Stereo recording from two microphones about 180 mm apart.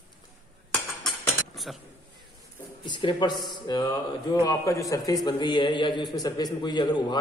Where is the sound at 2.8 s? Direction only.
25° left (ahead or behind).